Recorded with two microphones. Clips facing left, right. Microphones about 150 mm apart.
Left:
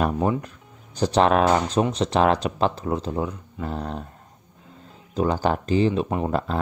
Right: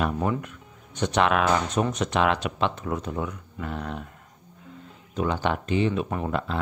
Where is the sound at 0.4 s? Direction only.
35° left (ahead or behind).